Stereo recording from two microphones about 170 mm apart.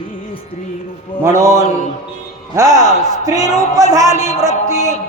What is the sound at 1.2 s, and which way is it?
A man's voice, 15° right (ahead or behind).